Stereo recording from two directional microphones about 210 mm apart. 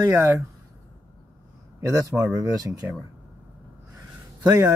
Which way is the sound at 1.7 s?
15° right (ahead or behind).